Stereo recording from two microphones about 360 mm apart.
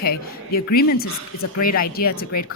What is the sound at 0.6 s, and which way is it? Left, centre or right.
Speech, left.